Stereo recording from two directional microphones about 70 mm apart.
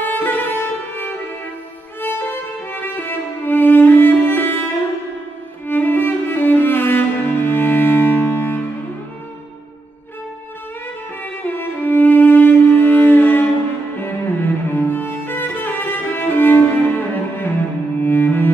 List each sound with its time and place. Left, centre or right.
0.0 s music: left
2.0 s violin: left
5.7 s music: left
11.4 s music: left
18.0 s cello: left